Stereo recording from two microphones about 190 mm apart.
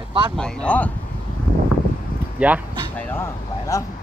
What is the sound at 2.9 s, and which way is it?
Speech, 10° left (ahead or behind).